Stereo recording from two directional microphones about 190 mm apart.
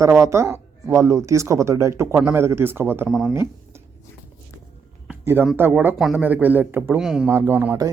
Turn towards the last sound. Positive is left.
turn(degrees=-10)  # may be behind; listen again after turning